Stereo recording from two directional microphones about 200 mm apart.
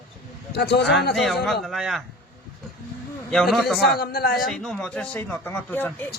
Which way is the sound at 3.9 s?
50° left (ahead or behind).